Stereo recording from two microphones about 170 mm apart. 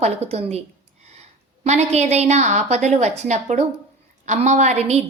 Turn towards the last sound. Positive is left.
turn(degrees=-40)  # may be behind; listen again after turning